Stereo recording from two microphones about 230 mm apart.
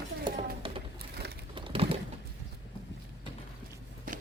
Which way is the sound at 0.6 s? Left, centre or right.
Right.